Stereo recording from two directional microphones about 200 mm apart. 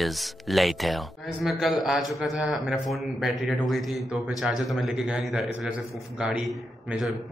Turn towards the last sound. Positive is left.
turn(degrees=0)  # may be behind; listen again after turning